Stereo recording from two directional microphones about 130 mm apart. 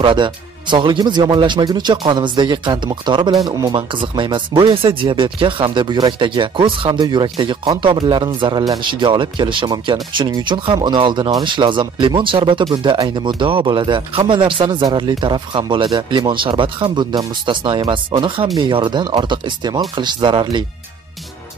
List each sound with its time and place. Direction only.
0.0 s speech: 35° right (ahead or behind)